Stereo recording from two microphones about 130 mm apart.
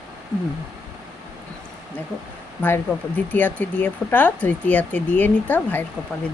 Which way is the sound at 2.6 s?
15° left (ahead or behind).